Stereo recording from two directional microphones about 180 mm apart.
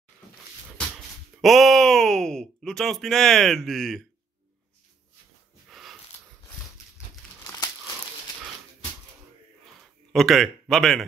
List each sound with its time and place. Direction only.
1.4 s speech: centre (ahead or behind)
5.7 s a sound: centre (ahead or behind)
7.4 s crumpling: 20° left (ahead or behind)
10.1 s speech: centre (ahead or behind)